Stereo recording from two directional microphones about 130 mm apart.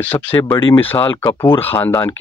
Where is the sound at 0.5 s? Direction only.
40° left (ahead or behind).